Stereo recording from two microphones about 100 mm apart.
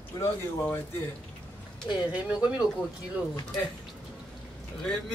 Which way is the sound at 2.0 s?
15° right (ahead or behind).